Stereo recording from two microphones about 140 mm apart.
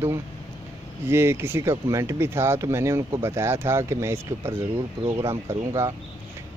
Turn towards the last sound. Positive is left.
turn(degrees=-20)  # may be behind; listen again after turning